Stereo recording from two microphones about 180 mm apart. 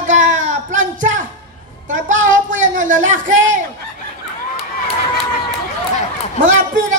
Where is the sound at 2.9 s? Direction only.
90° right.